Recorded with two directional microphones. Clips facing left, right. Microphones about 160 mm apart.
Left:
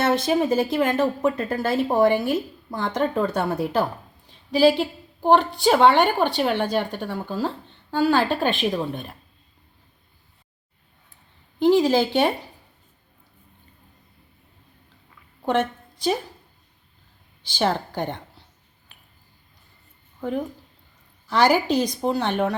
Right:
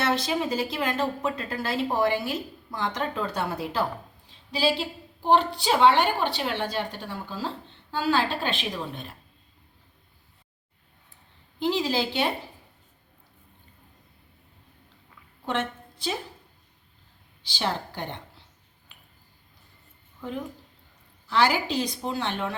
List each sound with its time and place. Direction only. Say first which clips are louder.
0.0 s a woman's voice: left 6 dB; 50° left (ahead or behind)
11.6 s a woman's voice: left 8 dB; 50° left (ahead or behind)
17.4 s speech: left 6 dB; 50° left (ahead or behind)
21.2 s a woman's voice: left 5 dB; 45° left (ahead or behind)